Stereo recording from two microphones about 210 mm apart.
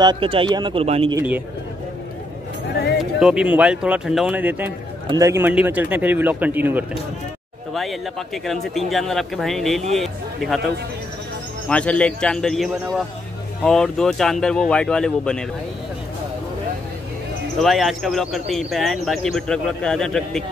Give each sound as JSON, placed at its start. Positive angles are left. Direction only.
{"t": 0.0, "sound": "speech", "side_deg": -20}
{"t": 1.1, "sound": "a man's voice", "side_deg": -10}
{"t": 3.0, "sound": "a man's voice", "side_deg": -5}
{"t": 11.7, "sound": "speech", "side_deg": 5}
{"t": 17.6, "sound": "speech", "side_deg": 0}